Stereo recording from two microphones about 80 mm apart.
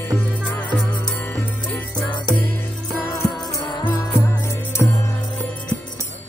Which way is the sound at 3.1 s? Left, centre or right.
Left.